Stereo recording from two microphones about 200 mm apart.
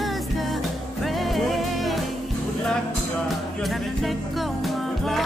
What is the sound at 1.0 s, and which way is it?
Music, centre (ahead or behind).